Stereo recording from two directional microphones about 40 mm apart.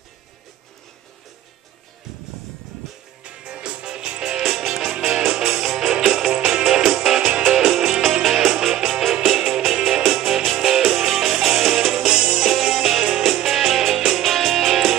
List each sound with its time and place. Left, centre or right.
3.3 s music: right; by 12.1 s centre
12.1 s music: right